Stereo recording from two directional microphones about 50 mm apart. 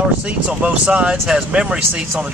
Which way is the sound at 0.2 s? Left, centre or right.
Right.